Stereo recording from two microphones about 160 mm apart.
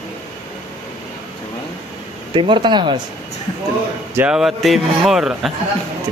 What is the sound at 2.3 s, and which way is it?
Speech, 30° right (ahead or behind).